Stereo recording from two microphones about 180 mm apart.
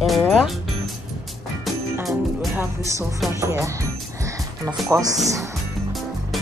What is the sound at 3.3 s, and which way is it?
Speech, 15° right (ahead or behind).